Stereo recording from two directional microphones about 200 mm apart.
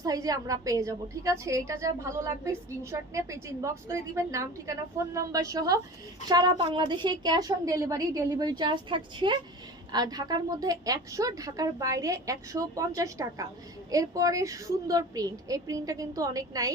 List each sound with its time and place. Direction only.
0.0 s a woman's voice: 15° right (ahead or behind)